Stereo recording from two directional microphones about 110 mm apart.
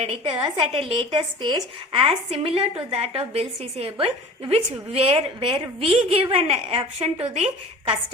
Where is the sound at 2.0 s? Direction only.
65° right (ahead or behind).